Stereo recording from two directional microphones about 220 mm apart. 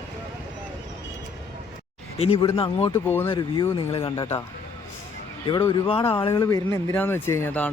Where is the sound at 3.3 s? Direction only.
20° left (ahead or behind).